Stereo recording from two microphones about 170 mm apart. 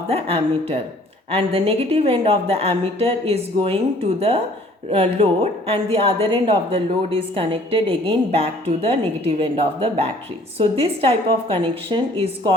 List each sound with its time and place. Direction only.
0.1 s a woman's voice: 35° right (ahead or behind)
4.9 s a woman's voice: 35° right (ahead or behind)